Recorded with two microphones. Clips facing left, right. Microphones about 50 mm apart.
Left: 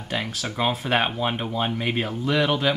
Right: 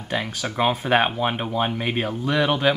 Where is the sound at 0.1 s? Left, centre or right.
Centre.